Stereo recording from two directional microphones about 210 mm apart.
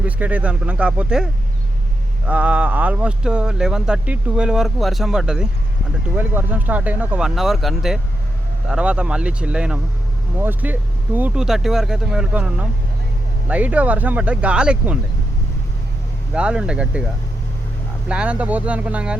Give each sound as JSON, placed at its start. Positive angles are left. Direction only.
{"t": 0.0, "sound": "speech", "side_deg": -5}
{"t": 13.5, "sound": "speech", "side_deg": -5}
{"t": 16.3, "sound": "speech", "side_deg": -5}
{"t": 18.1, "sound": "speech", "side_deg": -5}